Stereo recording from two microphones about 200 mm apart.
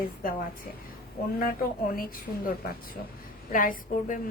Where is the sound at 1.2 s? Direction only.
50° left (ahead or behind).